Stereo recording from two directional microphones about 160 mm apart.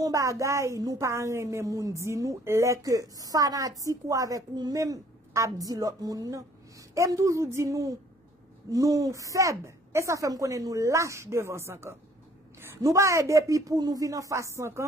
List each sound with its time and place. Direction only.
0.0 s a woman's voice: 20° right (ahead or behind)